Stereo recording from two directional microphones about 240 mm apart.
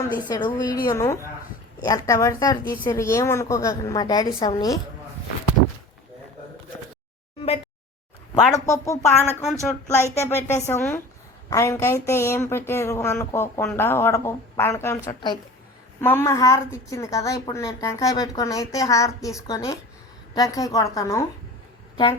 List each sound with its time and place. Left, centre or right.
0.1 s a woman's voice: centre
8.5 s a woman's voice: centre
9.4 s speech: centre
9.8 s a woman's voice: centre